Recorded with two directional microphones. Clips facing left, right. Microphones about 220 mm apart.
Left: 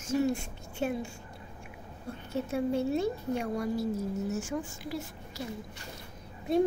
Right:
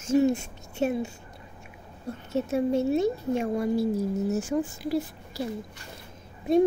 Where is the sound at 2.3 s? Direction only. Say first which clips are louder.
Right 5 dB; 25° right (ahead or behind).